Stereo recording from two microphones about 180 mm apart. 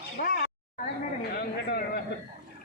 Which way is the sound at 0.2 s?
75° left (ahead or behind).